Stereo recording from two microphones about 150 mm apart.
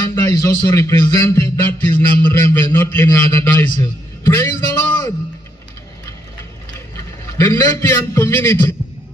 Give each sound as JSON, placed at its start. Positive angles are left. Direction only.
{"t": 0.1, "sound": "a man's voice", "side_deg": 20}
{"t": 7.3, "sound": "a man's voice", "side_deg": 20}